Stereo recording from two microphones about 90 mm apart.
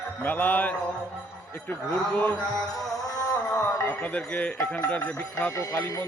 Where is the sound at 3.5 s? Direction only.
20° left (ahead or behind).